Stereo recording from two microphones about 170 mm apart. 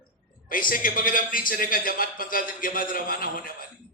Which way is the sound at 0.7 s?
55° left (ahead or behind).